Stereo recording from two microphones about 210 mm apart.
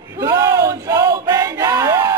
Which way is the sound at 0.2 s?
15° right (ahead or behind).